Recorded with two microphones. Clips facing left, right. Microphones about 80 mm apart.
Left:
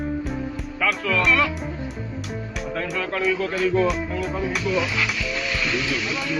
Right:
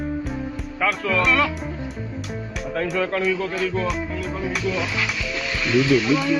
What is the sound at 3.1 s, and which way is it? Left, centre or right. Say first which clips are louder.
Speech: even; centre.